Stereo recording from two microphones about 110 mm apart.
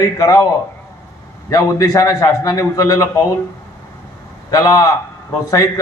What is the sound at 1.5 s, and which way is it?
A man's voice, 30° left (ahead or behind).